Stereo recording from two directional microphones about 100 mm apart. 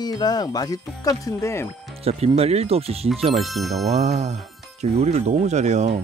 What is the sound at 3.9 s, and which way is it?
Speech, 90° right.